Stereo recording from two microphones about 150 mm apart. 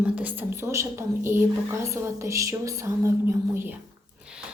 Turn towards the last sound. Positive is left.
turn(degrees=-5)  # may be behind; listen again after turning